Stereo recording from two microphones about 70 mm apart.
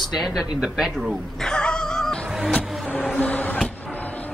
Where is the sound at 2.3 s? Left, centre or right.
Centre.